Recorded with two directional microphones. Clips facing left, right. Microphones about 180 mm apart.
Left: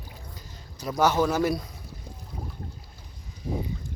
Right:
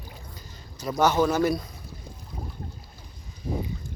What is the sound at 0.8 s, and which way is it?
Speech, 5° left (ahead or behind).